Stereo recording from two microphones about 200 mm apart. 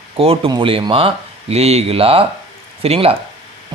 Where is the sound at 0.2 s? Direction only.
25° right (ahead or behind).